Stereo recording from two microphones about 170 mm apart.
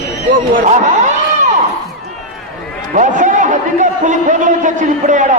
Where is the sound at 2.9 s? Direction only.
45° right (ahead or behind).